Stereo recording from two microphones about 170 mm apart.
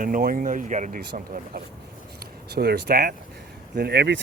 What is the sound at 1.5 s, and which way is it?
Speech, 65° right (ahead or behind).